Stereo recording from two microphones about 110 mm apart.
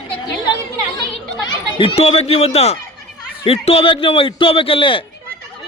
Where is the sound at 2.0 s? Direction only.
65° left (ahead or behind).